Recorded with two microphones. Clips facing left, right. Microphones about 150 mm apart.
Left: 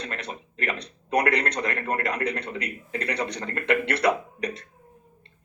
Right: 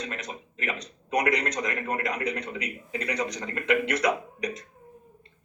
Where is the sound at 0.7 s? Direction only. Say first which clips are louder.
Left 3 dB; 60° left (ahead or behind).